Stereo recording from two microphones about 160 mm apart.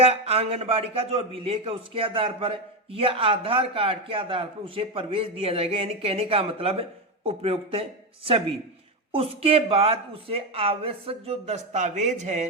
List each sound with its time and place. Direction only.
0.0 s a man's voice: 40° right (ahead or behind)